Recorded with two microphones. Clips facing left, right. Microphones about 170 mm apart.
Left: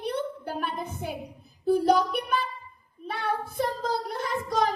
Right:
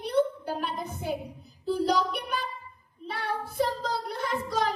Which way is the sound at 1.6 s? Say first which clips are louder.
Left 4 dB; 55° left (ahead or behind).